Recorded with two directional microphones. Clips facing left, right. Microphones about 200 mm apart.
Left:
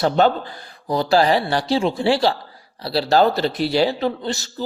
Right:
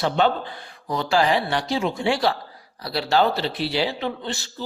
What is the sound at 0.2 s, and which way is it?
Speech, 40° left (ahead or behind).